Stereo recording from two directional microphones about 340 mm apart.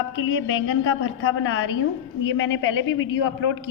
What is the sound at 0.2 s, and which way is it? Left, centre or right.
A man's voice, left.